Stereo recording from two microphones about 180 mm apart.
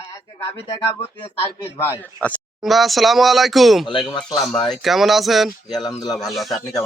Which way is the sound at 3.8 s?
25° left (ahead or behind).